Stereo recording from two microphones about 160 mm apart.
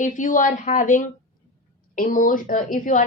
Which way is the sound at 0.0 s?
55° left (ahead or behind).